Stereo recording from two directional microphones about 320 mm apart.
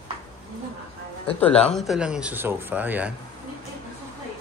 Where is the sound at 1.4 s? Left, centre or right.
Centre.